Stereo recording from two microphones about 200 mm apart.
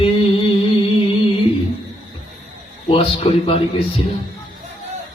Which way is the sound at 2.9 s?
30° left (ahead or behind).